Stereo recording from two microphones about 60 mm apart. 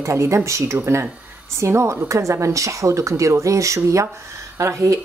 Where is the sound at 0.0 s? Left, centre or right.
Right.